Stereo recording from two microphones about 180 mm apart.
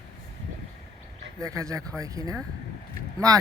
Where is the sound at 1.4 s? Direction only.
20° right (ahead or behind).